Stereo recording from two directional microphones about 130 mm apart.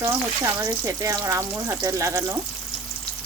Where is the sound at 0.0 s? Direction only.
20° right (ahead or behind).